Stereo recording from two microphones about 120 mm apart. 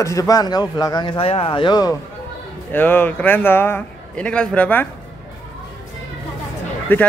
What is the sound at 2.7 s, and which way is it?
A man's voice, 15° left (ahead or behind).